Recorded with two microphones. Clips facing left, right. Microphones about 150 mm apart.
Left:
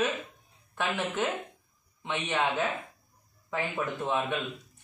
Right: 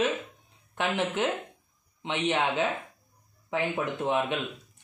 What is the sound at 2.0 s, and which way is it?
Speech, 20° right (ahead or behind).